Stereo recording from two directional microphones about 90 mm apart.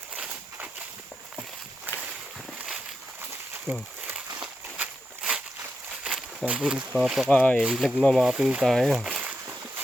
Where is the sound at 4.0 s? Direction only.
15° right (ahead or behind).